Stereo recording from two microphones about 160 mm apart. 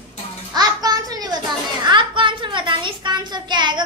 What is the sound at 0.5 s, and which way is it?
Child singing, 25° right (ahead or behind).